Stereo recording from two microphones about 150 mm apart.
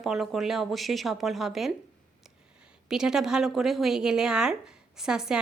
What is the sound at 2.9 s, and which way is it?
A woman's voice, 5° right (ahead or behind).